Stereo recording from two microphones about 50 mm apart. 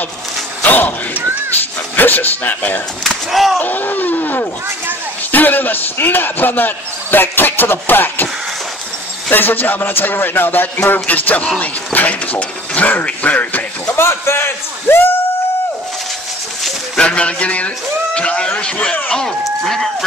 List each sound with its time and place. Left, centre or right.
0.6 s speech: left
3.0 s speech: centre
3.5 s a man's voice: left
9.3 s a man's voice: left
13.9 s speech: left
16.9 s music: left
18.8 s a man's voice: left
19.4 s speech: centre